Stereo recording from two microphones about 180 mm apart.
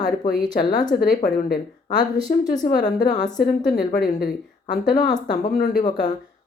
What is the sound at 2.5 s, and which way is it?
A woman's voice, 50° left (ahead or behind).